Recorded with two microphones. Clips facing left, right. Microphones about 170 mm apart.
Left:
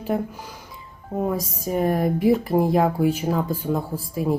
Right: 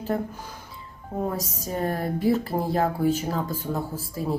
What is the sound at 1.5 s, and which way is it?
Speech, 15° left (ahead or behind).